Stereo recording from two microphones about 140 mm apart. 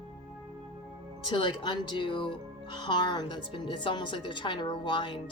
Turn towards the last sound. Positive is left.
turn(degrees=35)  # may be behind; listen again after turning